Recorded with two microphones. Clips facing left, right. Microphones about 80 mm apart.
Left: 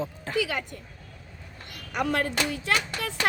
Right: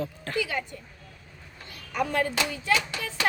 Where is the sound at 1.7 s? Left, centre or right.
Left.